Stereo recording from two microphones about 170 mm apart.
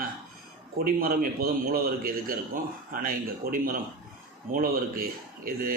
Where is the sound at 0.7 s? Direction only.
60° right (ahead or behind).